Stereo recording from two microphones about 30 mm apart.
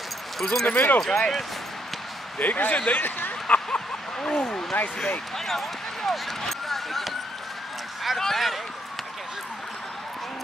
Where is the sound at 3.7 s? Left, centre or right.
Left.